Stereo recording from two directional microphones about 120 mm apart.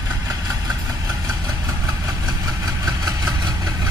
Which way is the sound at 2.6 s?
30° right (ahead or behind).